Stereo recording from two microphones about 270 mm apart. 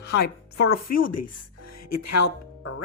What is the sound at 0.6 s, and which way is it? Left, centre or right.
Speech, left.